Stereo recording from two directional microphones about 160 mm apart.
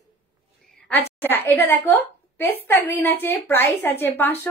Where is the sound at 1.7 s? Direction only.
15° left (ahead or behind).